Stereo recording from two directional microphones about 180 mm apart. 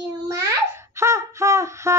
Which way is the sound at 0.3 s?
15° right (ahead or behind).